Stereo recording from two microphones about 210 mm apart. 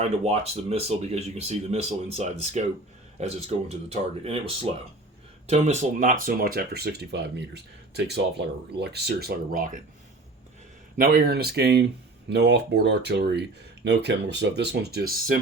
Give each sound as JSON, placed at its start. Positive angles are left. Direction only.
{"t": 0.0, "sound": "speech", "side_deg": -30}
{"t": 5.5, "sound": "speech", "side_deg": -30}
{"t": 10.9, "sound": "speech", "side_deg": -45}